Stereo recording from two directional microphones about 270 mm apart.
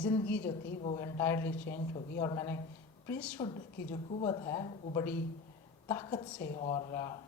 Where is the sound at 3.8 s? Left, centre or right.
Centre.